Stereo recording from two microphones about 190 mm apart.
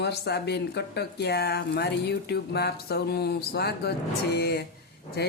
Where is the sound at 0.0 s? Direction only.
60° left (ahead or behind).